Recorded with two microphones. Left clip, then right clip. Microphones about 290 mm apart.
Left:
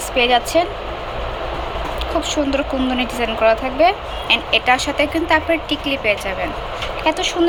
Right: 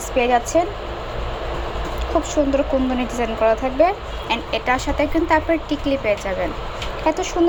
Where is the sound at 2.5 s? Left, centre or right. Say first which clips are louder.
Even; centre.